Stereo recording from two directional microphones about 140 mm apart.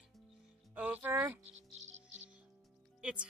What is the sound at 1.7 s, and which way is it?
Insect, 50° right (ahead or behind).